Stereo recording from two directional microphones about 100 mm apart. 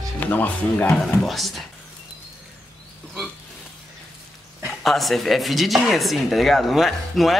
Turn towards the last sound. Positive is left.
turn(degrees=0)  # may be behind; listen again after turning